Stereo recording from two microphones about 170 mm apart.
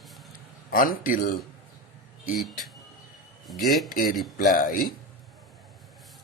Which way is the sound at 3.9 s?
55° left (ahead or behind).